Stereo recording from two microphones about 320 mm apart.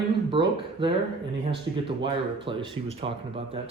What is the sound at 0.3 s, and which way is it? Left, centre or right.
Speech, centre.